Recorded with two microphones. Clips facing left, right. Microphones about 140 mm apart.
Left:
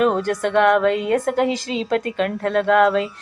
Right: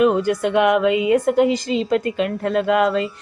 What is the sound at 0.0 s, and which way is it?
A woman's voice, 5° right (ahead or behind).